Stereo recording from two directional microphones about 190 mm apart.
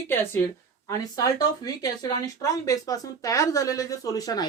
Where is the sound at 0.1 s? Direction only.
10° left (ahead or behind).